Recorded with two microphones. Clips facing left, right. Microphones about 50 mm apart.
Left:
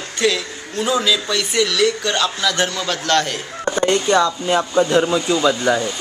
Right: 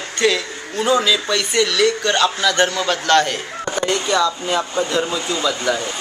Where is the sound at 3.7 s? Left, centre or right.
Centre.